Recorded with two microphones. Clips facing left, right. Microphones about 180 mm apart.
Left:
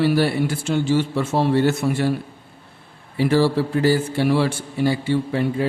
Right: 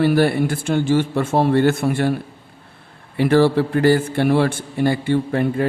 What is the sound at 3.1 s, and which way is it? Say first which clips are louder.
A man's voice: right 3 dB; 60° right (ahead or behind).